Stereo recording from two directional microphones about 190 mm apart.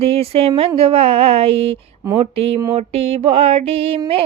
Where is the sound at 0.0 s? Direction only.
30° right (ahead or behind).